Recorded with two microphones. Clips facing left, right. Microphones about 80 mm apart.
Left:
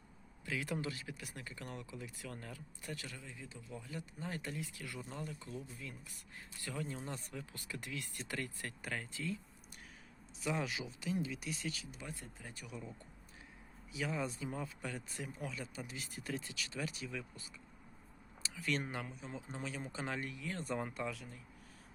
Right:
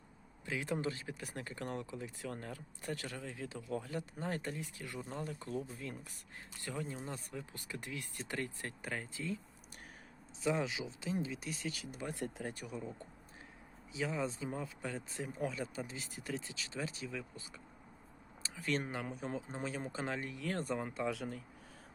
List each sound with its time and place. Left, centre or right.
0.4 s speech: right
3.2 s speech: right
4.6 s speech: right
5.2 s speech: right
6.6 s speech: right
10.4 s speech: right
12.4 s speech: right
13.9 s speech: centre
15.3 s speech: right
18.4 s speech: right
19.0 s speech: right
19.5 s speech: right
20.7 s speech: centre
21.1 s speech: right